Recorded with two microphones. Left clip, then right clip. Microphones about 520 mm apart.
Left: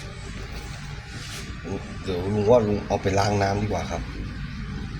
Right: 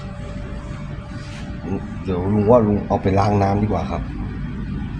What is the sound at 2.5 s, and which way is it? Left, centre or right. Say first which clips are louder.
A man's voice: right 4 dB; left.